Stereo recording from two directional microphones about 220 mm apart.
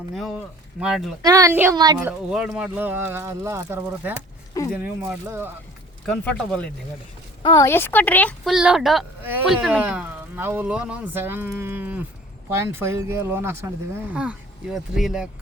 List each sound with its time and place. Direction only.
0.1 s speech: centre (ahead or behind)
1.2 s speech: 15° right (ahead or behind)
2.0 s speech: 5° right (ahead or behind)
7.4 s a woman's voice: 15° left (ahead or behind); by 15.3 s centre (ahead or behind)